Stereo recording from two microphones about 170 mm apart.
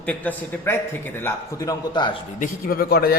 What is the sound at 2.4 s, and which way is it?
Speech, 60° left (ahead or behind).